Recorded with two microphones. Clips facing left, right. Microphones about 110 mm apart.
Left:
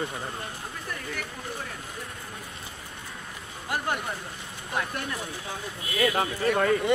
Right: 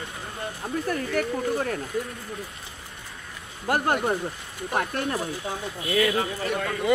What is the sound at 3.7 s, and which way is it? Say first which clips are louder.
Speech: right 7 dB; 55° right (ahead or behind).